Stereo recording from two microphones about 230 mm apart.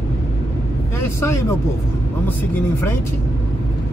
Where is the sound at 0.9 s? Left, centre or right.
Centre.